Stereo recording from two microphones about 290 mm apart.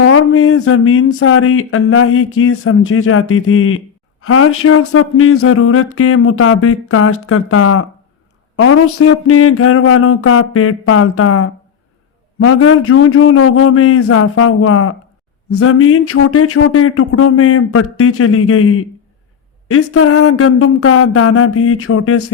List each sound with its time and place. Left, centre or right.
0.0 s speech: left